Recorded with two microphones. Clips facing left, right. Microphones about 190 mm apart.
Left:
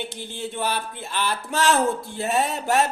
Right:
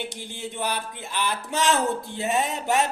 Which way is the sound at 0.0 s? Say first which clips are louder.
Left 2 dB; 15° right (ahead or behind).